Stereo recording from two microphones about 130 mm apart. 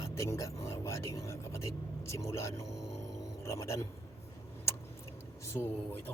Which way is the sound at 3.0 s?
25° left (ahead or behind).